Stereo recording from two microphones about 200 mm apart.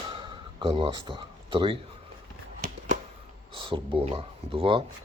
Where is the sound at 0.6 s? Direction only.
25° right (ahead or behind).